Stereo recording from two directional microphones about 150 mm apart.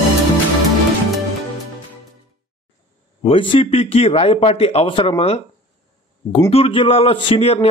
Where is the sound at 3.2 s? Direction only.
35° left (ahead or behind).